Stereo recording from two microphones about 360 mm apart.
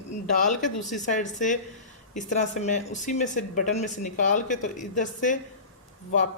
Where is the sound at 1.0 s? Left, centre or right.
Left.